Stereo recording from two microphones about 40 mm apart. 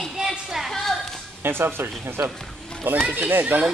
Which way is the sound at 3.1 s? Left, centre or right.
Right.